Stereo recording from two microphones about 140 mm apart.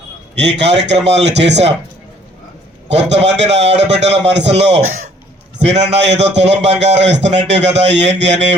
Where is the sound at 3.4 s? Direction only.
50° right (ahead or behind).